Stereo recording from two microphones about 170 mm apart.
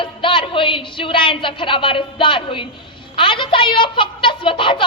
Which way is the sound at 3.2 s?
30° left (ahead or behind).